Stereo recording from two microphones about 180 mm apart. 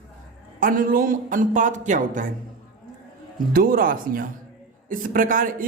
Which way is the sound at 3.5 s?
55° right (ahead or behind).